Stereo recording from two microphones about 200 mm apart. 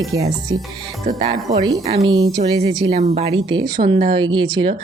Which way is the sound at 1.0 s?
35° right (ahead or behind).